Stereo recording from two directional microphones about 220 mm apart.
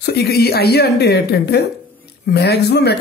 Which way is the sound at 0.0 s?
45° left (ahead or behind).